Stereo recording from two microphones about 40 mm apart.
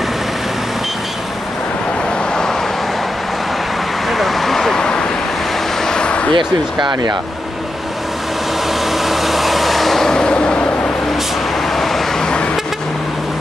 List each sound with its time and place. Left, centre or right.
4.1 s vehicle: centre
4.7 s vehicle: centre
5.9 s a sound: left
8.9 s vehicle: centre
10.0 s vehicle: centre
11.7 s vehicle: centre
12.2 s vehicle: left